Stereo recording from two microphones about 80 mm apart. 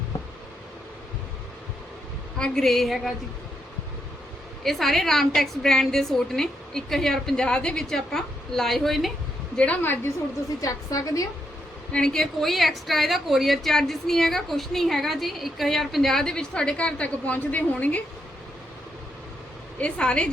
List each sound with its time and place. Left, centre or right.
2.4 s a woman's voice: centre
4.6 s a woman's voice: centre
9.6 s a woman's voice: centre
10.6 s a woman's voice: left
11.9 s a woman's voice: centre
19.8 s speech: centre